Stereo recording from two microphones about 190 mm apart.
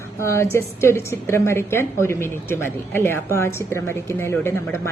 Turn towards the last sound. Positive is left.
turn(degrees=15)  # may be behind; listen again after turning